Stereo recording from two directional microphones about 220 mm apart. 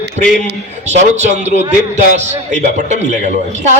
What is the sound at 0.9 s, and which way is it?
A man's voice, 30° right (ahead or behind).